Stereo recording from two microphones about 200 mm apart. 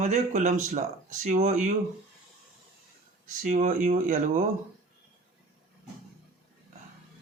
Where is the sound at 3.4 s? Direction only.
35° right (ahead or behind).